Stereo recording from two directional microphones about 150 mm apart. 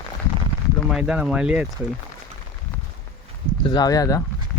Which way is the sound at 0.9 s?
5° right (ahead or behind).